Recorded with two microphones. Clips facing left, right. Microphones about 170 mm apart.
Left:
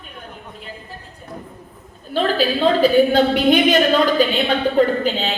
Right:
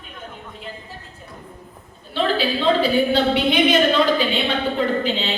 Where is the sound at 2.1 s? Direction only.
45° left (ahead or behind).